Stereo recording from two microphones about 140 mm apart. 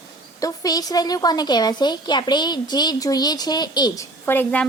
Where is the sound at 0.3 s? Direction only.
25° left (ahead or behind).